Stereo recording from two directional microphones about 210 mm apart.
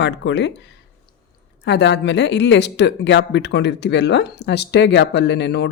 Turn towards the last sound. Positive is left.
turn(degrees=55)  # may be behind; listen again after turning